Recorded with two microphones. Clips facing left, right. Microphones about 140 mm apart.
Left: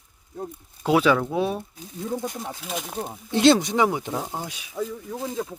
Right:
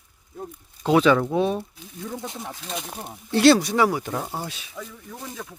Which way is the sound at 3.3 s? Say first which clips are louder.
Right 1 dB; 20° left (ahead or behind).